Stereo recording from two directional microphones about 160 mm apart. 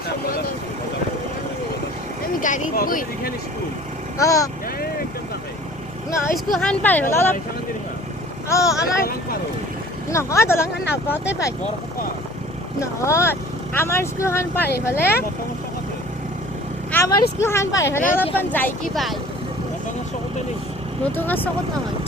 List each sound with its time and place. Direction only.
2.4 s speech: 60° left (ahead or behind)
4.2 s speech: 20° left (ahead or behind)
6.1 s speech: 15° left (ahead or behind)
6.3 s speech: centre (ahead or behind)
8.4 s speech: 20° left (ahead or behind)
10.1 s speech: 20° left (ahead or behind)
12.8 s speech: 20° left (ahead or behind)
16.9 s vehicle: 10° left (ahead or behind)
17.4 s speech: 15° left (ahead or behind)
21.0 s speech: 10° left (ahead or behind)